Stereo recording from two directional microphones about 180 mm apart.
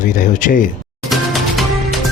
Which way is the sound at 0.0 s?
45° left (ahead or behind).